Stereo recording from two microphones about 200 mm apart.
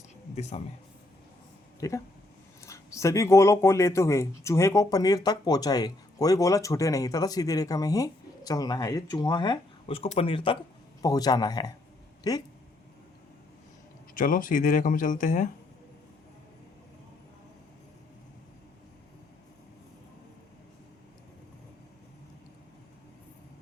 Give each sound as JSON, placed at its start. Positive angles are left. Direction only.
{"t": 0.6, "sound": "speech", "side_deg": 35}
{"t": 1.8, "sound": "speech", "side_deg": 15}
{"t": 14.1, "sound": "speech", "side_deg": 45}